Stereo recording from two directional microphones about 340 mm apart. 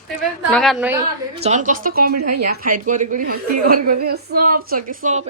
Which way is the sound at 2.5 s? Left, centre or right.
Right.